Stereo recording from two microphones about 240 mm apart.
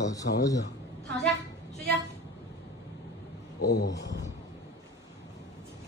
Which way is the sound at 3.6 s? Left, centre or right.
Left.